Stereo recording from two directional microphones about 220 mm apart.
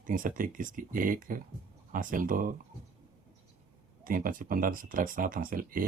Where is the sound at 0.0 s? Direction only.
40° right (ahead or behind).